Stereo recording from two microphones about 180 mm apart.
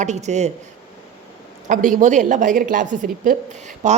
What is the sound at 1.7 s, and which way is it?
A woman's voice, 45° right (ahead or behind).